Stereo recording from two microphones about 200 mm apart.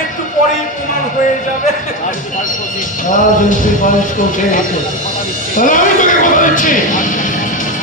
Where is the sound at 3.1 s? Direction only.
40° left (ahead or behind).